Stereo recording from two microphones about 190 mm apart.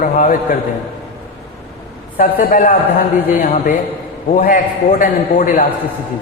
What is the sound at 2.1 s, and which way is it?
A man's voice, 45° left (ahead or behind).